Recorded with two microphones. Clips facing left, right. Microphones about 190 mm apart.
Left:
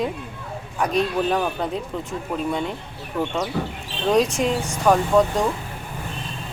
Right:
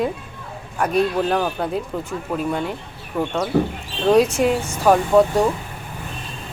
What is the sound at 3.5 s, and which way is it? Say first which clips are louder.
Speech: right 8 dB; 55° right (ahead or behind).